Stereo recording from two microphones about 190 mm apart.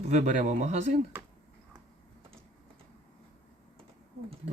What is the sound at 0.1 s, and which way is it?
Speech, 40° right (ahead or behind).